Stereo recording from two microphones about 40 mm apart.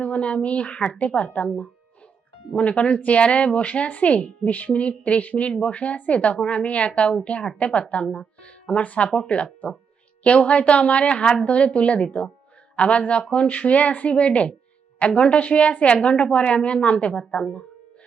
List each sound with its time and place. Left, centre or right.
0.0 s speech: left
2.6 s a woman's voice: left